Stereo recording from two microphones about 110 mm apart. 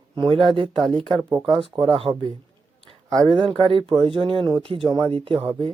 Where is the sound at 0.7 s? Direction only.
Centre (ahead or behind).